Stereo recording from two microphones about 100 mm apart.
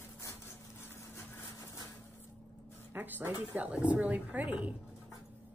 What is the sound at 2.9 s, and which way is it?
Speech, 20° right (ahead or behind).